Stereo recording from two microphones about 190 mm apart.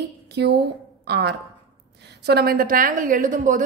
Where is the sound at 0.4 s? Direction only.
60° right (ahead or behind).